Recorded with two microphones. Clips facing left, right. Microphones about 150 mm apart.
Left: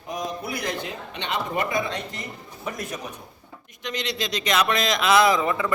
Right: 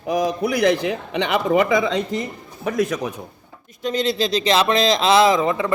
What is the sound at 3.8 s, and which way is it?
Speech, 30° right (ahead or behind).